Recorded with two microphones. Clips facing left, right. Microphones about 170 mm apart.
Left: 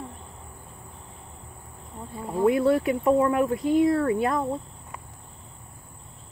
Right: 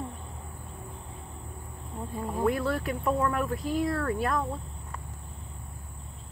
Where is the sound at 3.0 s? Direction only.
20° left (ahead or behind).